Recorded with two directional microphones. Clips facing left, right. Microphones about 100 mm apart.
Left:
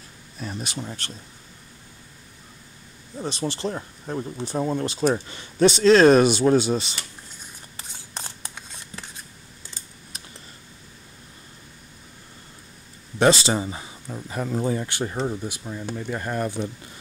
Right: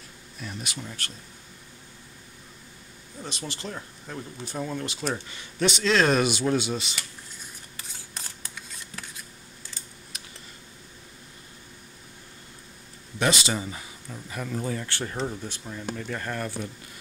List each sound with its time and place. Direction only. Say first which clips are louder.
0.4 s speech: left 5 dB; 35° left (ahead or behind)
3.2 s speech: left 9 dB; 35° left (ahead or behind)
7.7 s scissors: left 5 dB; 25° left (ahead or behind)
13.2 s speech: left 7 dB; 35° left (ahead or behind)